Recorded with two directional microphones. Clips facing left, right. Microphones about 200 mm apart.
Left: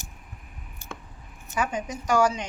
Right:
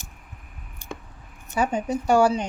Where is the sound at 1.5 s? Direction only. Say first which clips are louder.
Right 5 dB; 40° right (ahead or behind).